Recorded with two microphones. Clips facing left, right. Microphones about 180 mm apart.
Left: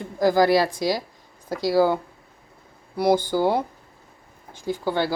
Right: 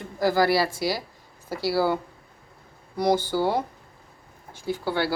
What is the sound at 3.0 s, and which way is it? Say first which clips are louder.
Speech: left 3 dB; 10° left (ahead or behind).